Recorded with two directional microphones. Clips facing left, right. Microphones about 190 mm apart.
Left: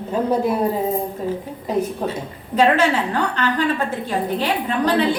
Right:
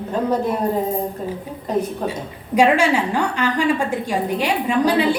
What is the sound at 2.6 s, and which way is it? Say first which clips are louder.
A woman's voice: right 1 dB; 10° right (ahead or behind).